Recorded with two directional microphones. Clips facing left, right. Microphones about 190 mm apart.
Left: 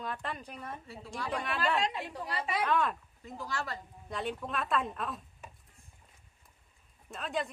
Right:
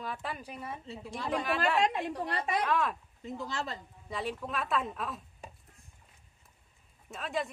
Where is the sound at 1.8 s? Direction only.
50° right (ahead or behind).